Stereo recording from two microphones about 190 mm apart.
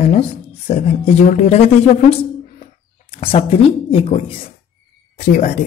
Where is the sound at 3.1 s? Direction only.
30° left (ahead or behind).